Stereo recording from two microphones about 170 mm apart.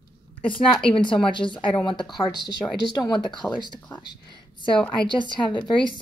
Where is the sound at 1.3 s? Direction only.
30° left (ahead or behind).